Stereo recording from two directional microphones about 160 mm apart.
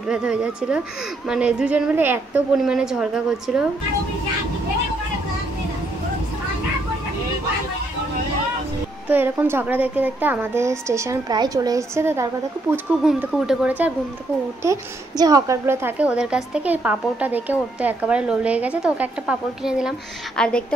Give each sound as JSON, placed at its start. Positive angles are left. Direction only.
{"t": 0.1, "sound": "a woman's voice", "side_deg": -5}
{"t": 9.1, "sound": "a woman's voice", "side_deg": -10}
{"t": 14.6, "sound": "a woman's voice", "side_deg": -20}
{"t": 20.3, "sound": "a woman's voice", "side_deg": 5}